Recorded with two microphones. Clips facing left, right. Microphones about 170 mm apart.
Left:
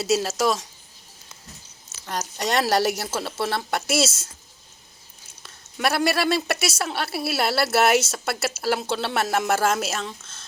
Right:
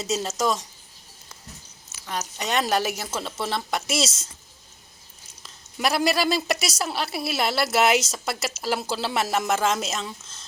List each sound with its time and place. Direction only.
0.0 s a woman's voice: 10° left (ahead or behind)
2.9 s a woman's voice: 5° left (ahead or behind)
5.4 s a woman's voice: centre (ahead or behind)